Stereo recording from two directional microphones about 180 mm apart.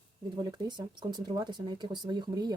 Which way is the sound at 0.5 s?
25° right (ahead or behind).